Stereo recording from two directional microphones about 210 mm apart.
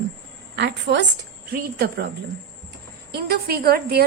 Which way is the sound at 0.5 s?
55° right (ahead or behind).